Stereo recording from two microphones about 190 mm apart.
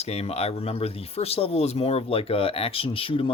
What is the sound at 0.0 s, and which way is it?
Speech, 35° left (ahead or behind).